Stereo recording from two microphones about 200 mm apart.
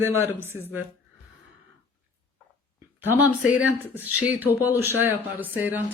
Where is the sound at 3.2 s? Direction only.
10° right (ahead or behind).